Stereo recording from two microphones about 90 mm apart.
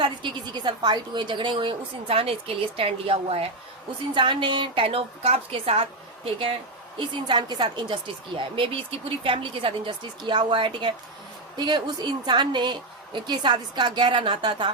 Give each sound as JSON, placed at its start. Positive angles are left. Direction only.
{"t": 0.0, "sound": "a woman's voice", "side_deg": -60}
{"t": 4.1, "sound": "a woman's voice", "side_deg": -65}
{"t": 7.3, "sound": "a woman's voice", "side_deg": -55}